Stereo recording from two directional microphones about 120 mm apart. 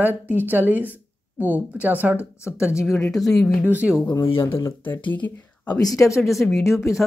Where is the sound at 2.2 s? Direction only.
20° left (ahead or behind).